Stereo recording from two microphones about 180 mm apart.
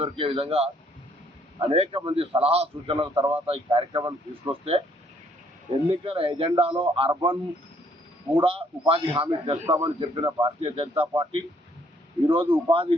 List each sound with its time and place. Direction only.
0.0 s a man's voice: 30° right (ahead or behind)
5.9 s a man's voice: 30° right (ahead or behind)
8.4 s a man's voice: 30° right (ahead or behind)